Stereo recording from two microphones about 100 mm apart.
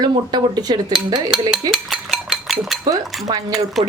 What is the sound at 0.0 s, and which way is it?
Cutlery, 45° right (ahead or behind).